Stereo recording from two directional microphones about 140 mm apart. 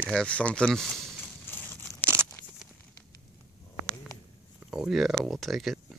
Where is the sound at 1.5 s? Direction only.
15° left (ahead or behind).